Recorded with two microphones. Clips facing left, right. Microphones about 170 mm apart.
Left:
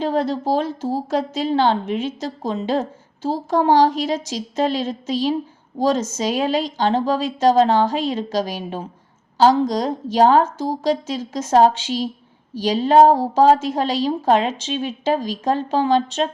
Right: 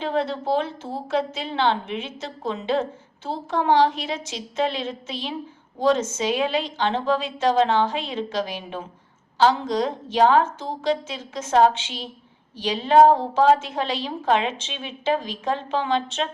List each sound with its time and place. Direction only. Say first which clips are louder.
0.0 s a woman's voice: left 4 dB; 40° left (ahead or behind)